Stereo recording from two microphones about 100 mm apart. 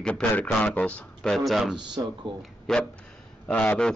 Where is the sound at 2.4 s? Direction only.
5° left (ahead or behind).